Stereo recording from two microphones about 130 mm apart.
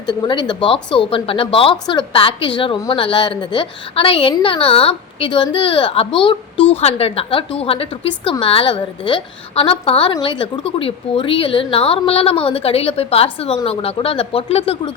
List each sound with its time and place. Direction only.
0.1 s a woman's voice: 35° left (ahead or behind)